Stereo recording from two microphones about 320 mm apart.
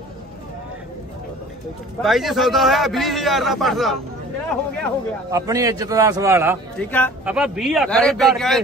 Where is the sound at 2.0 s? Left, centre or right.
Centre.